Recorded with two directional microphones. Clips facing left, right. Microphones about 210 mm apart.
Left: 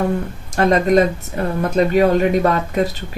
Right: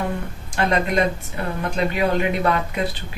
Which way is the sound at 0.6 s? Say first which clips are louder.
Left 6 dB; 40° left (ahead or behind).